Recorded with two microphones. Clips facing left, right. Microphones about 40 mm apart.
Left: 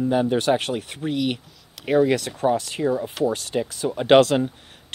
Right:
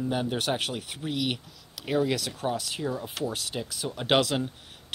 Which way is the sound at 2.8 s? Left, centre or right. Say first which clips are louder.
Left 10 dB; left.